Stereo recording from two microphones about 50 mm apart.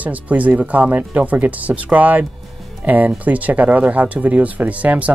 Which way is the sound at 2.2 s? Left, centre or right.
Centre.